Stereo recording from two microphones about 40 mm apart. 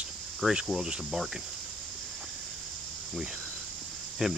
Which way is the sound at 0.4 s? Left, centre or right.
Right.